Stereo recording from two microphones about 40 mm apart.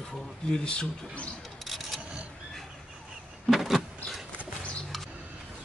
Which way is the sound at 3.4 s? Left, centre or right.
Centre.